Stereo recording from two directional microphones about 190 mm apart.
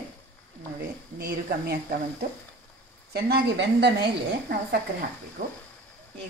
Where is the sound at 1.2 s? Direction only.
55° right (ahead or behind).